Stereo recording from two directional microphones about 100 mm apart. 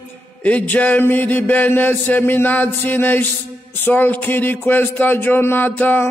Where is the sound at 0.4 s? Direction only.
15° left (ahead or behind).